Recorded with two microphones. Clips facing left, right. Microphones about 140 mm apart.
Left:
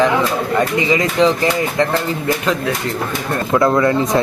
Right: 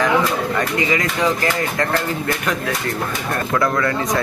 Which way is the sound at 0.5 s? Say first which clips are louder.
Left 4 dB; 20° left (ahead or behind).